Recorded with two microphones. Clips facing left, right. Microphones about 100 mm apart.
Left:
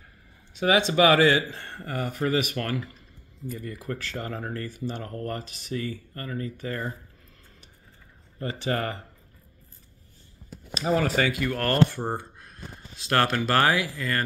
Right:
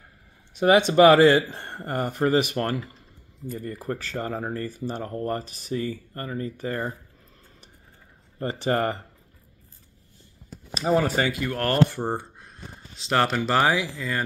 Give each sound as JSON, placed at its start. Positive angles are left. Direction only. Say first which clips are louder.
{"t": 0.9, "sound": "speech", "louder": "right 5 dB", "side_deg": -40}
{"t": 4.1, "sound": "speech", "louder": "right 4 dB", "side_deg": -20}
{"t": 4.6, "sound": "speech", "louder": "right 2 dB", "side_deg": -40}
{"t": 5.0, "sound": "speech", "louder": "right 4 dB", "side_deg": -25}
{"t": 8.4, "sound": "speech", "louder": "right 4 dB", "side_deg": -35}
{"t": 10.8, "sound": "speech", "louder": "right 2 dB", "side_deg": -20}
{"t": 11.4, "sound": "speech", "louder": "right 2 dB", "side_deg": -15}